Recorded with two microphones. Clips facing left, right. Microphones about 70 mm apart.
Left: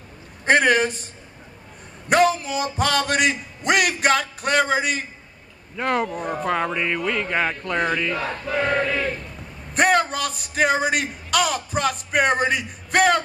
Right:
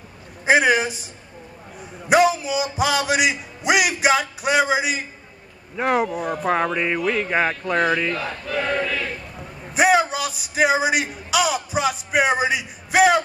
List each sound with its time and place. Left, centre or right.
0.5 s music: centre
2.0 s music: centre
8.1 s crowd: centre
9.8 s a man's voice: centre